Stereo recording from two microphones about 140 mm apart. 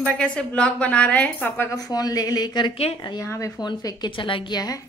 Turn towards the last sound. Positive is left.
turn(degrees=30)  # may be behind; listen again after turning